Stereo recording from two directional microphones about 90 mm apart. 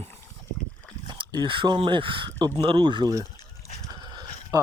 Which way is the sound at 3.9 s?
50° right (ahead or behind).